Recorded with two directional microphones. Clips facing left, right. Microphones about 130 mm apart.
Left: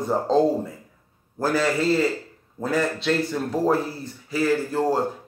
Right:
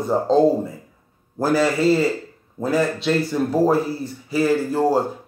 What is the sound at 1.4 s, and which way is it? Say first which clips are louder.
A man's voice: right 4 dB; 10° right (ahead or behind).